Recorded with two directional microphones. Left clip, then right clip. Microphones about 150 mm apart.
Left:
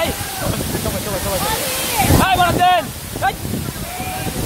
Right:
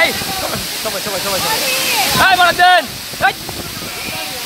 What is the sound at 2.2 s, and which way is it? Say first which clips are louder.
Speech: right 6 dB; 20° right (ahead or behind).